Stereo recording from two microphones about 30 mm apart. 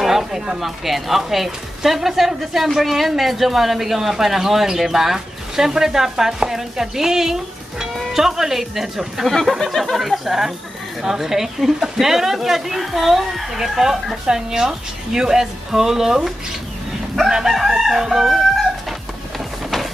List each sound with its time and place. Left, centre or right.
0.0 s speech: centre
9.2 s speech: centre
17.3 s chicken: centre